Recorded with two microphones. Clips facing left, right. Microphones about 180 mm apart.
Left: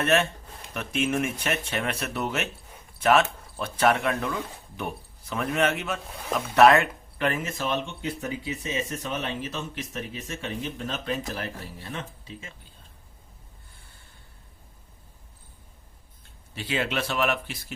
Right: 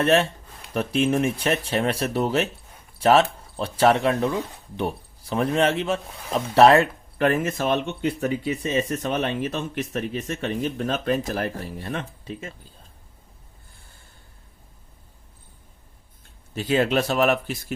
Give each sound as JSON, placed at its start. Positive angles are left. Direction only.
{"t": 0.0, "sound": "speech", "side_deg": -30}
{"t": 7.3, "sound": "speech", "side_deg": -50}
{"t": 16.6, "sound": "speech", "side_deg": -40}